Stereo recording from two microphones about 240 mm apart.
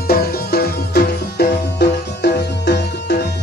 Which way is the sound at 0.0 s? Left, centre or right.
Left.